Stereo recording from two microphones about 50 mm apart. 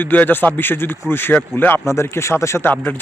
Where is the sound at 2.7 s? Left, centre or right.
Left.